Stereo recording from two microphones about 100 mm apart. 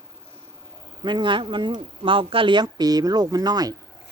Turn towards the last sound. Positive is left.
turn(degrees=-40)  # may be behind; listen again after turning